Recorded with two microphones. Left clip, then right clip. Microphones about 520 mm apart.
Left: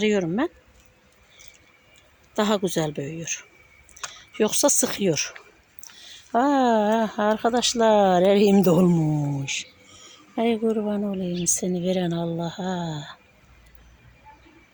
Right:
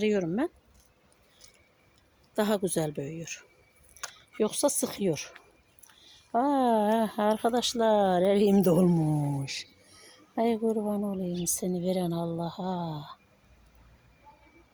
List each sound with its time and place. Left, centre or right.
0.0 s speech: right
2.3 s speech: right